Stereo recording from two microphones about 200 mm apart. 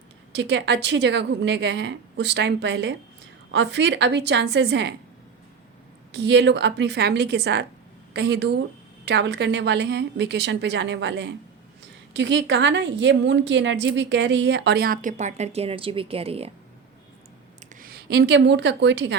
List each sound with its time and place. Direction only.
0.3 s a woman's voice: 60° right (ahead or behind)
6.1 s a woman's voice: 60° right (ahead or behind); by 16.5 s 30° right (ahead or behind)
17.7 s a woman's voice: 50° right (ahead or behind)